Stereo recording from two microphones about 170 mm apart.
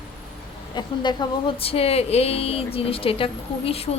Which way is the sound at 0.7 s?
25° left (ahead or behind).